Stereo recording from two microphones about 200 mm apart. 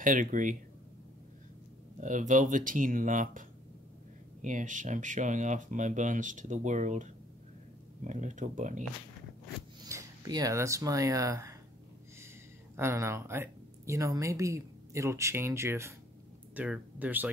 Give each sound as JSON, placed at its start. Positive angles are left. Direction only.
{"t": 0.0, "sound": "speech", "side_deg": -40}
{"t": 2.0, "sound": "speech", "side_deg": -40}
{"t": 9.8, "sound": "speech", "side_deg": -15}
{"t": 12.7, "sound": "speech", "side_deg": -15}